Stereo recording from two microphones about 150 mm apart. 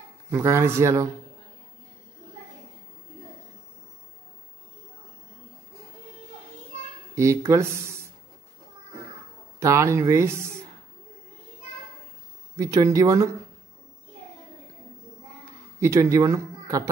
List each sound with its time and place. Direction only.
0.3 s a man's voice: 15° right (ahead or behind)
7.2 s speech: 20° right (ahead or behind)
9.6 s speech: 20° right (ahead or behind)
12.5 s speech: 25° right (ahead or behind)
15.8 s speech: 20° right (ahead or behind)